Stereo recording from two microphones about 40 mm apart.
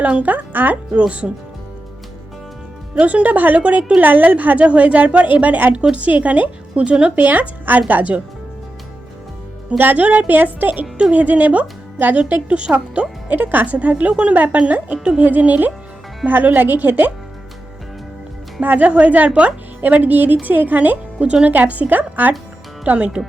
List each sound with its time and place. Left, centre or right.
0.2 s speech: right
0.9 s speech: right
2.9 s speech: right
3.6 s speech: right
4.0 s speech: right
4.6 s speech: right
7.2 s speech: right
9.7 s speech: right
13.3 s speech: right
13.9 s speech: right
14.3 s speech: right
18.6 s speech: right
19.8 s speech: right
22.9 s speech: right